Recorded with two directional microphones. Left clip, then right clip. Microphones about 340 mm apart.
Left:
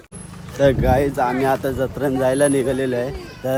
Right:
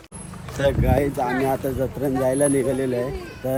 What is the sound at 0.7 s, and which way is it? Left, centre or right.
Speech, centre.